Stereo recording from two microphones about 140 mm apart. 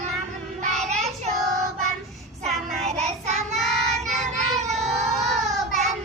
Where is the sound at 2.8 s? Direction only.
50° right (ahead or behind).